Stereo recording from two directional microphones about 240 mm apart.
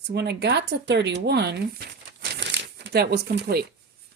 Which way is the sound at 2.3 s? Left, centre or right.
Right.